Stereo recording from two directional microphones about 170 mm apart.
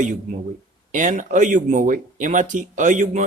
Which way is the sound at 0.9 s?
45° right (ahead or behind).